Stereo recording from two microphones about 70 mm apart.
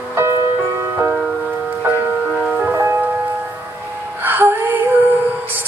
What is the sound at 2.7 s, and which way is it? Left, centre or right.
Music, right.